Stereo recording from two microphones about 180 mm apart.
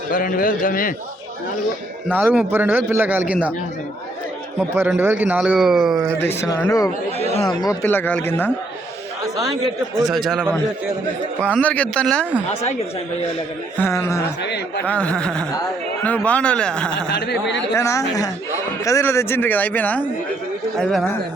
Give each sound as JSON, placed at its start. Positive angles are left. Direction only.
{"t": 0.1, "sound": "a man's voice", "side_deg": 50}
{"t": 2.0, "sound": "a man's voice", "side_deg": -10}
{"t": 4.9, "sound": "a man's voice", "side_deg": -10}
{"t": 6.2, "sound": "speech", "side_deg": 15}
{"t": 10.1, "sound": "a man's voice", "side_deg": 0}
{"t": 13.7, "sound": "a man's voice", "side_deg": 15}
{"t": 17.1, "sound": "speech", "side_deg": 65}
{"t": 17.7, "sound": "a man's voice", "side_deg": 15}